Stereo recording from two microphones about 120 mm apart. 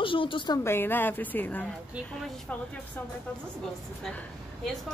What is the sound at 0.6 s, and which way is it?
A woman's voice, 20° left (ahead or behind).